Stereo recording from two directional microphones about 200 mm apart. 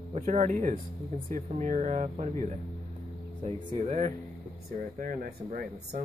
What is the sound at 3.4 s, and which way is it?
Speech, 35° right (ahead or behind).